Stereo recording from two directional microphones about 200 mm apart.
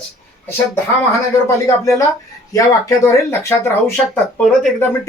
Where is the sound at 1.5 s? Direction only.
15° left (ahead or behind).